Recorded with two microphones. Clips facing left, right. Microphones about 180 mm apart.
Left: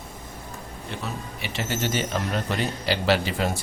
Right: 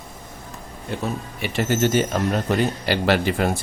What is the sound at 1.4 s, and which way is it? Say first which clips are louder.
Speech: right 8 dB; 50° right (ahead or behind).